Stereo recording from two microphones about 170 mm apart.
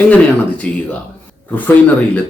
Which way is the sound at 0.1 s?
10° left (ahead or behind).